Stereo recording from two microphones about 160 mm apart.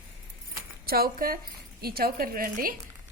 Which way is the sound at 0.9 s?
65° right (ahead or behind).